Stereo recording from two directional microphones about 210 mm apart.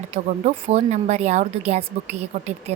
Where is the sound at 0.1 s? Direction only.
30° right (ahead or behind).